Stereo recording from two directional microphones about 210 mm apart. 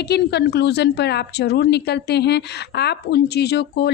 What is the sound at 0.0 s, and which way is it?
A woman's voice, 50° left (ahead or behind).